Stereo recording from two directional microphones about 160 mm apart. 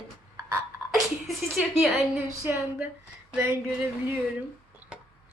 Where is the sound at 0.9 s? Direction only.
Centre (ahead or behind).